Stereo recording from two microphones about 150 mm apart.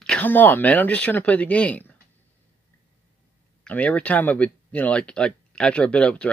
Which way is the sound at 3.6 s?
10° left (ahead or behind).